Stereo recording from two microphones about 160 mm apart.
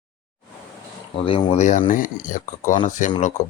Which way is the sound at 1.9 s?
55° left (ahead or behind).